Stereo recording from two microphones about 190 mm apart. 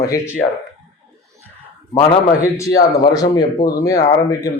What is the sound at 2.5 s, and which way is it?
A man's voice, 15° left (ahead or behind).